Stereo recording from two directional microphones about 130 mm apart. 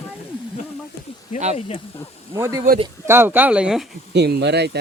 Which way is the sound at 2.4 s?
20° right (ahead or behind).